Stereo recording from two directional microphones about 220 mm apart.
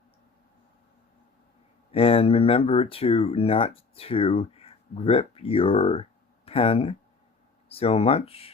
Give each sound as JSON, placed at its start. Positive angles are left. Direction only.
{"t": 1.9, "sound": "speech", "side_deg": 25}